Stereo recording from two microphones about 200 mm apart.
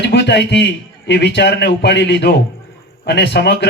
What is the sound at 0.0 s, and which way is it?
Speech, 60° left (ahead or behind).